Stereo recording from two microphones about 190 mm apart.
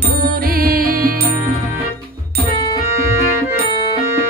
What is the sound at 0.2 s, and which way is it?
Music, 50° right (ahead or behind).